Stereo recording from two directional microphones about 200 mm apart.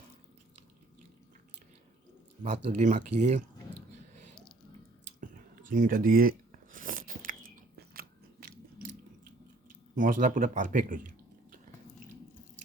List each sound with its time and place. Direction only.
2.6 s speech: 40° right (ahead or behind)
5.6 s biting: 40° right (ahead or behind)
9.9 s speech: 40° right (ahead or behind)